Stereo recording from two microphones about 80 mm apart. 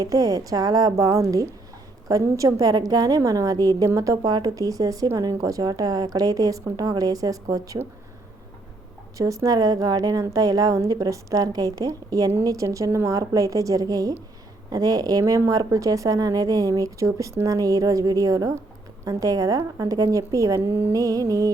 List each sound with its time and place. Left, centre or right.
0.0 s speech: right
9.1 s speech: right
15.2 s speech: right
20.7 s music: right
20.9 s speech: right